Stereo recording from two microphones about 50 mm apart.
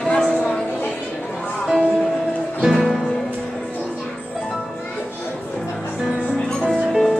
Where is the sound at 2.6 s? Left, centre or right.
Centre.